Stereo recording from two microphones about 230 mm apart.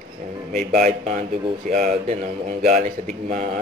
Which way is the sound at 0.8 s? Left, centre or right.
Right.